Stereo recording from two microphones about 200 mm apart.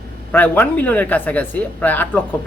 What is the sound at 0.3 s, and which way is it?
A man's voice, 10° left (ahead or behind).